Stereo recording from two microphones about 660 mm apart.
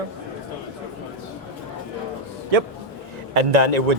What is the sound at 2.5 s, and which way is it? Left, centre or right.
Speech, right.